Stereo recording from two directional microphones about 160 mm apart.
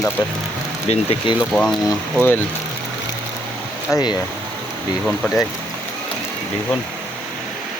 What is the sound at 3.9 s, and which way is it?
Speech, 25° left (ahead or behind).